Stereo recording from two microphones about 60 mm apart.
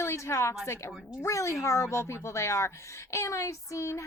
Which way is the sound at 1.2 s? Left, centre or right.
Left.